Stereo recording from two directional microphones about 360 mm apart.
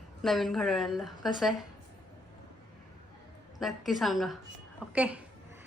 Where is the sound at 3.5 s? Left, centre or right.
Centre.